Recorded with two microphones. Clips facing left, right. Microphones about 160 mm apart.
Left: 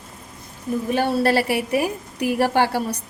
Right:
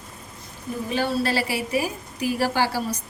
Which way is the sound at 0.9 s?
60° left (ahead or behind).